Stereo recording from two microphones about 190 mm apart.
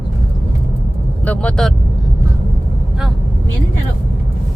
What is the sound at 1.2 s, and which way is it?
Vehicle, 5° left (ahead or behind).